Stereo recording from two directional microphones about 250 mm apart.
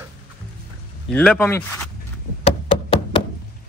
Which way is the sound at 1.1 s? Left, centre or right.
Centre.